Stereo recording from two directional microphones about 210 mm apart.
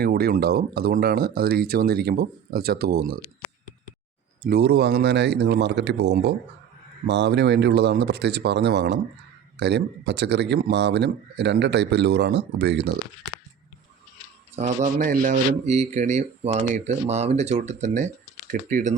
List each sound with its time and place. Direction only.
0.0 s speech: 45° right (ahead or behind)
4.4 s speech: 50° right (ahead or behind)
14.5 s speech: 35° right (ahead or behind)